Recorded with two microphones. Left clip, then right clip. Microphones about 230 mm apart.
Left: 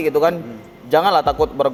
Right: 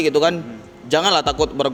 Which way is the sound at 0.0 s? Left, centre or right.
Right.